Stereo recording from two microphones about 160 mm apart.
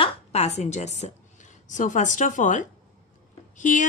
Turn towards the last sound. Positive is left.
turn(degrees=50)  # may be behind; listen again after turning